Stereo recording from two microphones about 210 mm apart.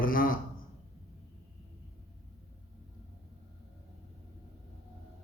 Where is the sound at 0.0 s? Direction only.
40° left (ahead or behind).